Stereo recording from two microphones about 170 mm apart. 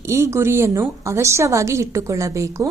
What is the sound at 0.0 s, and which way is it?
A woman's voice, 15° right (ahead or behind).